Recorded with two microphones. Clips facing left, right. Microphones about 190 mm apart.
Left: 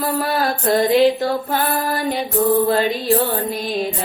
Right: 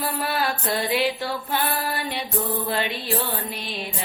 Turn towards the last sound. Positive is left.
turn(degrees=40)  # may be behind; listen again after turning